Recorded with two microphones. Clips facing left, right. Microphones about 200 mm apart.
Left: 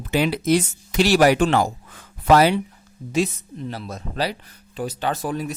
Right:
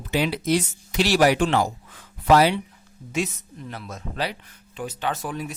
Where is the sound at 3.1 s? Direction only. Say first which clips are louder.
Left 5 dB; 30° left (ahead or behind).